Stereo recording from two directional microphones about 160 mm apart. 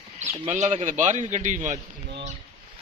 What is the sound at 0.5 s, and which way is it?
Speech, 45° right (ahead or behind).